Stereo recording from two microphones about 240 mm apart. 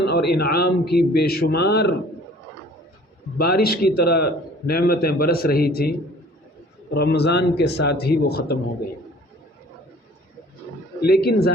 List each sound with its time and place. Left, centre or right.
0.0 s a man's voice: left
3.3 s a man's voice: left
6.9 s a man's voice: left
11.0 s a man's voice: left